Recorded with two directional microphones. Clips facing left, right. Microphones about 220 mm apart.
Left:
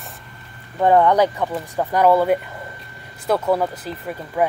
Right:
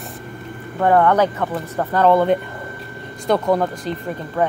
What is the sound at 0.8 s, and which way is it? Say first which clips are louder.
Speech: even; 15° left (ahead or behind).